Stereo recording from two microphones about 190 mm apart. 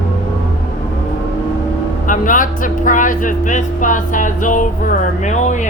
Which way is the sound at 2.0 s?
45° left (ahead or behind).